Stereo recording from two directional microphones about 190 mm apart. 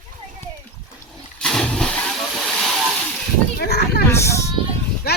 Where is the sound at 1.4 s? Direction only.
5° left (ahead or behind).